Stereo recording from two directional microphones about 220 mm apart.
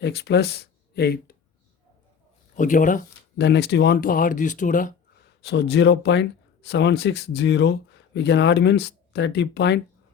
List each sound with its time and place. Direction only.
0.0 s speech: 50° left (ahead or behind)
2.6 s speech: 35° left (ahead or behind)
3.4 s speech: 50° left (ahead or behind)